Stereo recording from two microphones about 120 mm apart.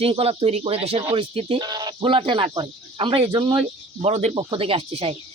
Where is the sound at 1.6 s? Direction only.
35° right (ahead or behind); by 4.3 s 65° right (ahead or behind).